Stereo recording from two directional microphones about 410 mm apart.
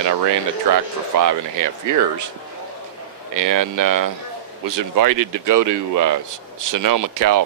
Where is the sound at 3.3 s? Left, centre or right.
Right.